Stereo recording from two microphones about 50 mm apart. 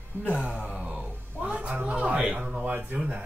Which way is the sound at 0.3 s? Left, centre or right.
Right.